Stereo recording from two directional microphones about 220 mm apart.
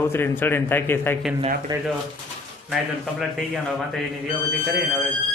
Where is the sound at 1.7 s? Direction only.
20° right (ahead or behind).